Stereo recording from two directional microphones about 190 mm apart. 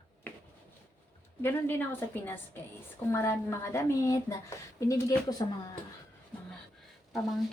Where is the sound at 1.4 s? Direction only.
10° left (ahead or behind).